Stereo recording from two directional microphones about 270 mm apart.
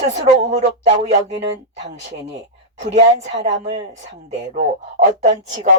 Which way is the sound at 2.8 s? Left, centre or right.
Right.